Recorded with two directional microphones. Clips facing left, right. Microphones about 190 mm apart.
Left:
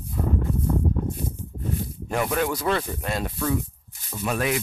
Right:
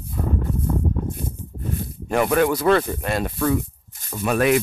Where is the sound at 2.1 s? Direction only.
60° right (ahead or behind).